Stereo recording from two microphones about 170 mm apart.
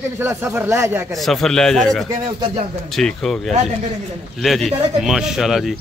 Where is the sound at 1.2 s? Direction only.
Centre (ahead or behind).